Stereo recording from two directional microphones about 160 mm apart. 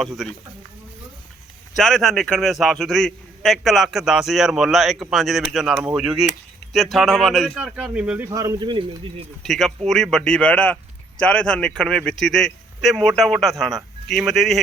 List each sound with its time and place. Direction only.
0.2 s a man's voice: centre (ahead or behind)
1.7 s a man's voice: centre (ahead or behind)
8.3 s speech: 20° right (ahead or behind)
9.4 s a man's voice: 5° left (ahead or behind)